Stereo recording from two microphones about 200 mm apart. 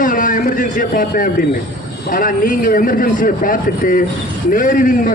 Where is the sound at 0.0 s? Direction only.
40° left (ahead or behind).